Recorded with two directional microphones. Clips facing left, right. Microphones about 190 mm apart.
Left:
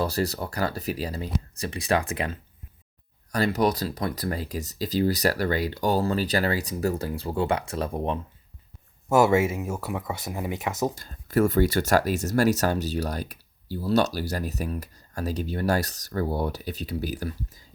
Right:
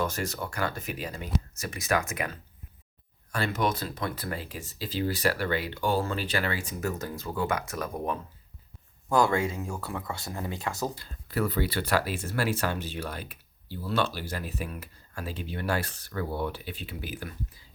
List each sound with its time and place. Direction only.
0.0 s speech: 35° left (ahead or behind); by 10.9 s 20° left (ahead or behind)
10.9 s speech: 45° left (ahead or behind)